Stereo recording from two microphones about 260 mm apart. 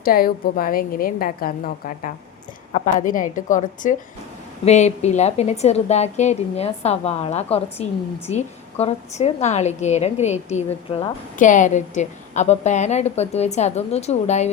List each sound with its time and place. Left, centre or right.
0.0 s a woman's voice: left